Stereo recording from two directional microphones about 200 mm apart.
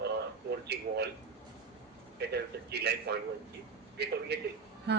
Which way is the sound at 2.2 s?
55° right (ahead or behind).